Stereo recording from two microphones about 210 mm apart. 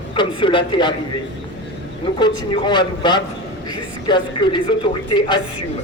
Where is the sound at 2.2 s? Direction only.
20° left (ahead or behind).